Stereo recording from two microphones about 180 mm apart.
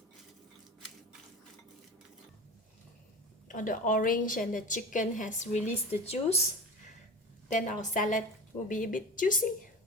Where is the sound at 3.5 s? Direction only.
50° left (ahead or behind).